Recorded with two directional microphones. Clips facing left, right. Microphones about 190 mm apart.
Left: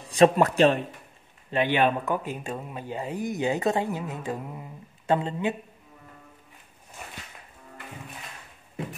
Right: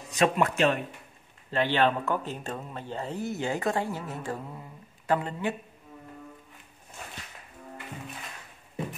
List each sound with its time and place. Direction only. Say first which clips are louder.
0.0 s speech: left 6 dB; 35° left (ahead or behind)
1.5 s speech: left 2 dB; 15° left (ahead or behind)